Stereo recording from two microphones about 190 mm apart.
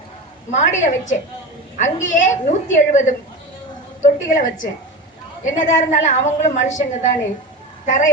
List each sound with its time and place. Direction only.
0.5 s a woman's voice: 40° left (ahead or behind)
5.5 s a woman's voice: 40° left (ahead or behind)